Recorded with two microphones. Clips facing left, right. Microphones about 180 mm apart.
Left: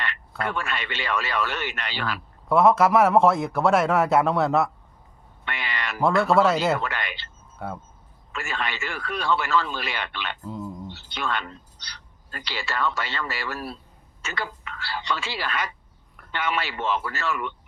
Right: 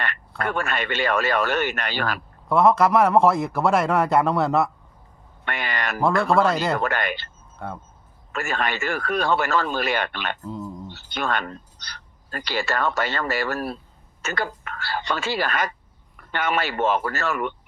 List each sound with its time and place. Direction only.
0.0 s speech: 50° right (ahead or behind)
2.5 s a man's voice: centre (ahead or behind)
5.5 s speech: 45° right (ahead or behind)
6.0 s a man's voice: centre (ahead or behind)
6.7 s speech: 50° right (ahead or behind)
7.6 s a man's voice: 5° left (ahead or behind)
8.3 s speech: 45° right (ahead or behind)